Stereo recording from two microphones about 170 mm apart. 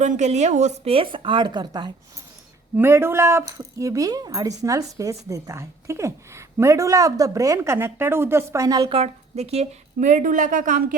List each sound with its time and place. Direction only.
0.0 s a woman's voice: 45° right (ahead or behind); by 1.9 s 25° right (ahead or behind)
2.7 s speech: 15° right (ahead or behind)
9.0 s a woman's voice: 40° right (ahead or behind); by 10.9 s 55° right (ahead or behind)